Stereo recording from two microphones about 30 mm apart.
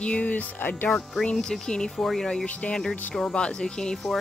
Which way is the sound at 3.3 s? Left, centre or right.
Left.